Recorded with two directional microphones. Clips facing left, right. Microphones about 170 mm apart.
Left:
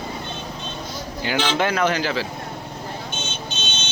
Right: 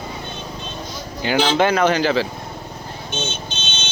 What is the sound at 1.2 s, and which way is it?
Speech, 25° right (ahead or behind).